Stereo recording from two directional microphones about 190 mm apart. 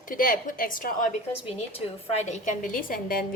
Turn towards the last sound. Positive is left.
turn(degrees=50)  # may be behind; listen again after turning